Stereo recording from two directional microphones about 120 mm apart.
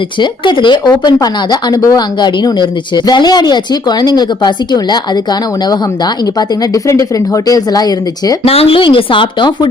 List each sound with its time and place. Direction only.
0.2 s speech: 40° left (ahead or behind)
7.4 s speech: 30° left (ahead or behind)
8.4 s speech: 55° left (ahead or behind)